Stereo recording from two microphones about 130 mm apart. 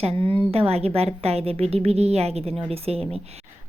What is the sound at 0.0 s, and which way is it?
A woman's voice, 45° right (ahead or behind).